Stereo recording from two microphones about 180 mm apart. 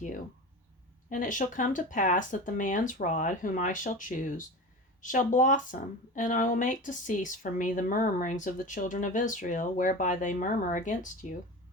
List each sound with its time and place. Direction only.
1.1 s speech: 45° left (ahead or behind)